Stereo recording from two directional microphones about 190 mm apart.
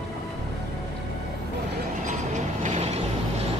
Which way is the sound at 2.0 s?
40° right (ahead or behind).